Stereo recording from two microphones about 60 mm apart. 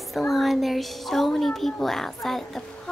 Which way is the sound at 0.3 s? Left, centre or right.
Centre.